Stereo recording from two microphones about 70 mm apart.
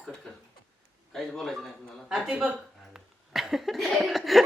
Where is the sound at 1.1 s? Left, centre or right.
Centre.